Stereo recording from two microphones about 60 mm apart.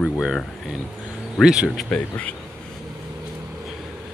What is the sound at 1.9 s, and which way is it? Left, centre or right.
Speech, left.